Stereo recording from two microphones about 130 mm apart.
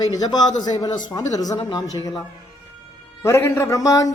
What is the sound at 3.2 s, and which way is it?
Speech, 20° left (ahead or behind).